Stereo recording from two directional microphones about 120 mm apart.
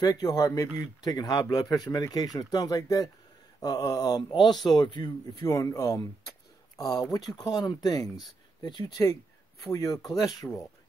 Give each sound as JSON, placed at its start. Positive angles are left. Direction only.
{"t": 0.0, "sound": "speech", "side_deg": 30}
{"t": 5.4, "sound": "speech", "side_deg": 25}